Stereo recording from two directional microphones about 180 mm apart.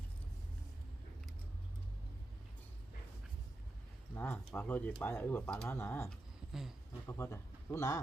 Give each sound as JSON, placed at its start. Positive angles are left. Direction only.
{"t": 4.1, "sound": "speech", "side_deg": 10}
{"t": 6.5, "sound": "a sound", "side_deg": 0}
{"t": 7.1, "sound": "speech", "side_deg": 15}